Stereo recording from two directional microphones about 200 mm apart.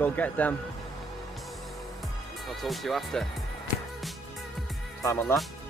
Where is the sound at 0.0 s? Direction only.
10° left (ahead or behind).